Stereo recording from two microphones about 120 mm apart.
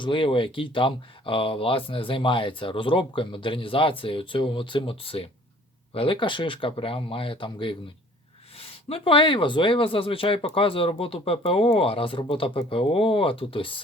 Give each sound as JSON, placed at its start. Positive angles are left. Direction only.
{"t": 0.0, "sound": "speech", "side_deg": 45}